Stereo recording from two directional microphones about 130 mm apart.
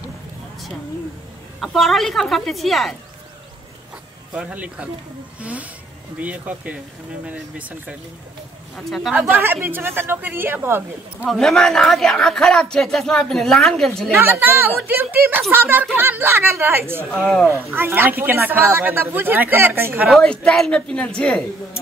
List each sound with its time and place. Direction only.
1.6 s speech: centre (ahead or behind)
4.4 s speech: 10° right (ahead or behind)
8.7 s speech: centre (ahead or behind)
9.2 s speech: 15° right (ahead or behind)
11.2 s speech: 5° left (ahead or behind)
14.1 s speech: 15° right (ahead or behind)
17.2 s speech: centre (ahead or behind)
17.7 s speech: 15° right (ahead or behind)
20.1 s speech: 5° left (ahead or behind)